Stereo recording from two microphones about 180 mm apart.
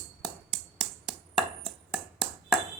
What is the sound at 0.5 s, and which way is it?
Finger snapping, centre (ahead or behind).